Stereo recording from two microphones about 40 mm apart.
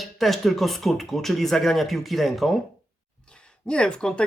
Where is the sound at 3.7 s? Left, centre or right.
Left.